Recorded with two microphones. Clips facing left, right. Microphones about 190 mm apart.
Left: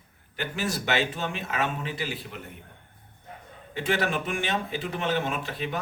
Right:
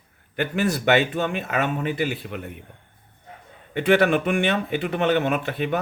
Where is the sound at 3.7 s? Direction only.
60° right (ahead or behind).